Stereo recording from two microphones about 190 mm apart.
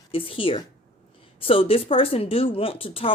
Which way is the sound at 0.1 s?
30° left (ahead or behind).